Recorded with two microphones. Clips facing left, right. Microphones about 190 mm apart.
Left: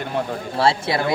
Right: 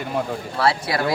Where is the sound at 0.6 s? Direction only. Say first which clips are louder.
Left 2 dB; 25° left (ahead or behind).